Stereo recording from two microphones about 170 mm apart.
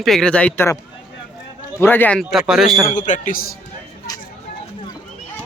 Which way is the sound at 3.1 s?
55° left (ahead or behind).